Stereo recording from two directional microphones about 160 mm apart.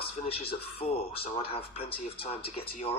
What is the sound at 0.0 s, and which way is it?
A man's voice, 40° left (ahead or behind).